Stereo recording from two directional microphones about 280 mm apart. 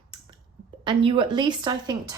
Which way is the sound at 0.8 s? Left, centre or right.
Centre.